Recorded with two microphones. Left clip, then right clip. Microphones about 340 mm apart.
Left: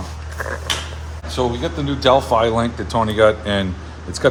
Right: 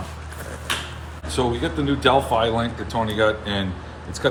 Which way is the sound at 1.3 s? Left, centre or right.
Centre.